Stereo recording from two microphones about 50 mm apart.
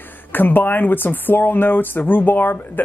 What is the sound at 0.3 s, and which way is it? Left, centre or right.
Speech, left.